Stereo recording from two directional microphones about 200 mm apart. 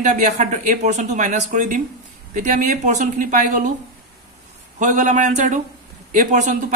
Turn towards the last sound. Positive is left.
turn(degrees=-40)  # may be behind; listen again after turning